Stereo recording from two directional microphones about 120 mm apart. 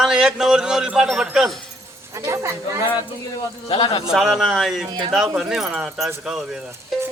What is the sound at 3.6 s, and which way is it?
Speech, 45° left (ahead or behind).